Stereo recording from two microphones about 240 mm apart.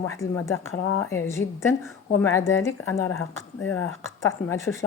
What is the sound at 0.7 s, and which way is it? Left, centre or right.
Speech, left.